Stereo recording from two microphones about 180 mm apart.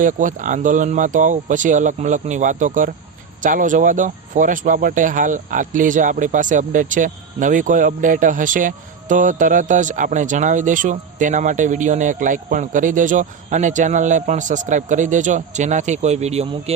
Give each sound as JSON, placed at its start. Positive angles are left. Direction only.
{"t": 0.0, "sound": "speech", "side_deg": -45}